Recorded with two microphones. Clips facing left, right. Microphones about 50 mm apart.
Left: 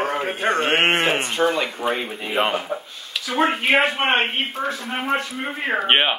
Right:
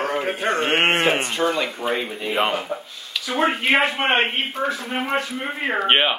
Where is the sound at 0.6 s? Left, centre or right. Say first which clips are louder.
Right 1 dB; centre.